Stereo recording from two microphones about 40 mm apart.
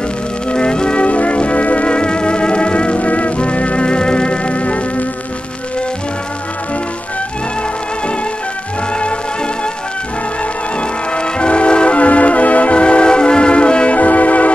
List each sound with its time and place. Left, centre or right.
0.5 s music: left
10.8 s music: left
13.9 s music: left